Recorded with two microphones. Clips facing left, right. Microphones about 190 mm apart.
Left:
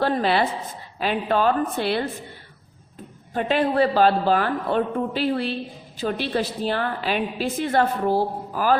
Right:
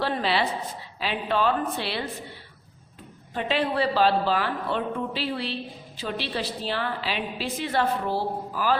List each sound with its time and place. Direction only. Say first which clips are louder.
0.0 s a woman's voice: left 5 dB; 50° left (ahead or behind)
3.3 s a woman's voice: left 5 dB; 50° left (ahead or behind)